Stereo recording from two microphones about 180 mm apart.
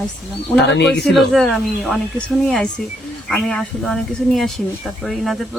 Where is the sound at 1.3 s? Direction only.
Centre (ahead or behind).